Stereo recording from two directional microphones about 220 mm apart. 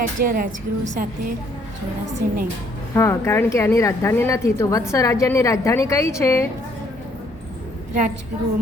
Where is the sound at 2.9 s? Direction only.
10° left (ahead or behind).